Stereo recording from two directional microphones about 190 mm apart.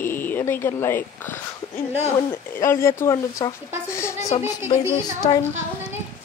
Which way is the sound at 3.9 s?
15° left (ahead or behind).